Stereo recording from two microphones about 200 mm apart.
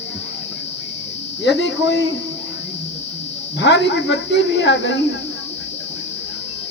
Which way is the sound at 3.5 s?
60° left (ahead or behind).